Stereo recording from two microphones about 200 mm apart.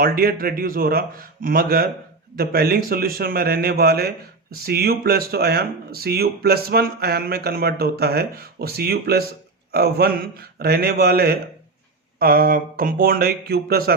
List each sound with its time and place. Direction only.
0.0 s speech: 50° right (ahead or behind)